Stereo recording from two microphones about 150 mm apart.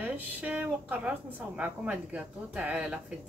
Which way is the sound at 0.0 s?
10° right (ahead or behind).